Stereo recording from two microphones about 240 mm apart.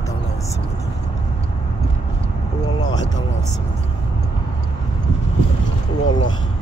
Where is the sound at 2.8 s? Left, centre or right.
Centre.